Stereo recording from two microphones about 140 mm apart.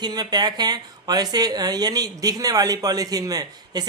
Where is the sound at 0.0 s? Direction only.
30° right (ahead or behind).